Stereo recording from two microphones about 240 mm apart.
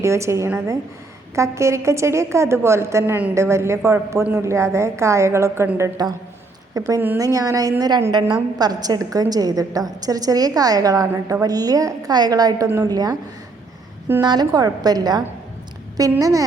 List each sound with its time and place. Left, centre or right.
0.0 s a woman's voice: centre